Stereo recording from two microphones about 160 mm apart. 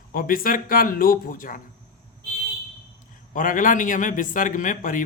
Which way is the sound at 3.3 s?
55° left (ahead or behind).